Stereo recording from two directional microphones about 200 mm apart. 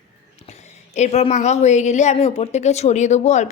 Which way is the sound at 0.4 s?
35° left (ahead or behind).